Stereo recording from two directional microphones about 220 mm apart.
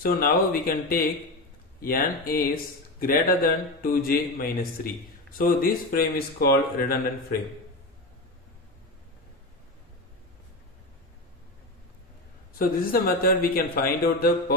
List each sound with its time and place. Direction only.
0.0 s speech: 40° left (ahead or behind)
12.5 s speech: 40° left (ahead or behind)